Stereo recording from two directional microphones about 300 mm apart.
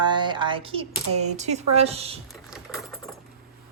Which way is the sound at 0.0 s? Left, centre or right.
Centre.